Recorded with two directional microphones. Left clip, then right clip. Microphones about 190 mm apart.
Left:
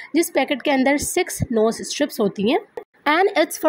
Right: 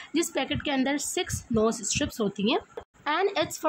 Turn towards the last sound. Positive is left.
turn(degrees=30)  # may be behind; listen again after turning